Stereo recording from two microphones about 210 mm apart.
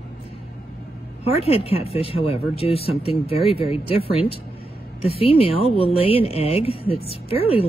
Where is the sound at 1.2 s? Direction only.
30° left (ahead or behind).